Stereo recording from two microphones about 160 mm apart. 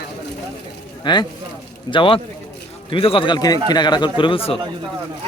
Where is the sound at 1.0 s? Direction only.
25° left (ahead or behind).